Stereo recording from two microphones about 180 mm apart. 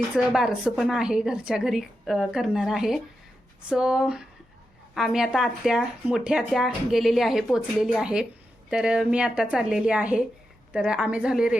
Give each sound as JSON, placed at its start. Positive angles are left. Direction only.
{"t": 0.2, "sound": "speech", "side_deg": -5}